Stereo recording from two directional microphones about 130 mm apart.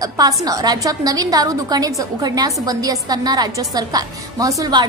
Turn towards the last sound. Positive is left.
turn(degrees=-25)  # may be behind; listen again after turning